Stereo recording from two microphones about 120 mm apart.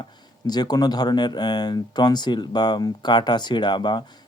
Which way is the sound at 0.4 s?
35° left (ahead or behind).